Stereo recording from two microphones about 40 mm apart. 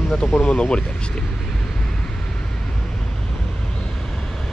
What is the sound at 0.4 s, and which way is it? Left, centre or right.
Speech, left.